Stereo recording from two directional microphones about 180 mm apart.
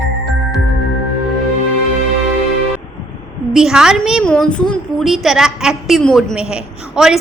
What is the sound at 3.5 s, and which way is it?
A woman's voice, 5° right (ahead or behind).